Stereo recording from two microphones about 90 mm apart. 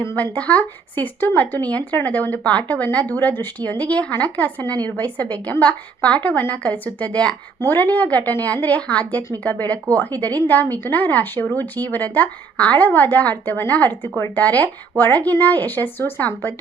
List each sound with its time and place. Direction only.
0.0 s speech: 30° left (ahead or behind)
0.3 s speech: 15° left (ahead or behind)